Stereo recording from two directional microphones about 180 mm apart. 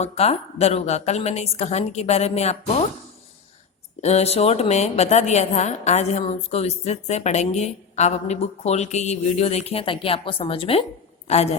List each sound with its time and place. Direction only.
0.0 s a woman's voice: 35° left (ahead or behind)
4.0 s a woman's voice: 35° left (ahead or behind)